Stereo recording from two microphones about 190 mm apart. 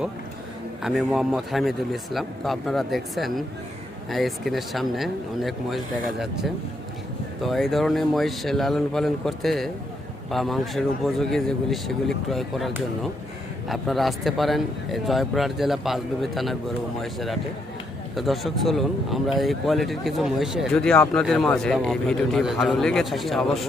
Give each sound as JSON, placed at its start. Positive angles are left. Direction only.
{"t": 0.8, "sound": "speech", "side_deg": 0}